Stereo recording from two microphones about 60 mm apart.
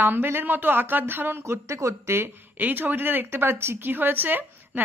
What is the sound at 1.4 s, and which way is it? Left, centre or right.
Speech, right.